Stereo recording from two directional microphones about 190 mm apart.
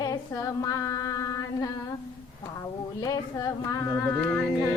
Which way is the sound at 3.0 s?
20° left (ahead or behind).